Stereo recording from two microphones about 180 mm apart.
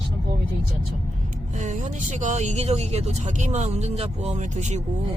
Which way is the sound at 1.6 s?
40° right (ahead or behind).